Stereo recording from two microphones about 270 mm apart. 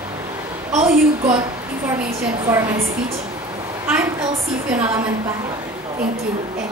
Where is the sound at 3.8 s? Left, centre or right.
Centre.